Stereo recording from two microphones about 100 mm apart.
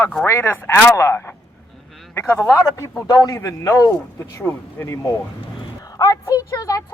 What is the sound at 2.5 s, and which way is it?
Speech, 30° left (ahead or behind).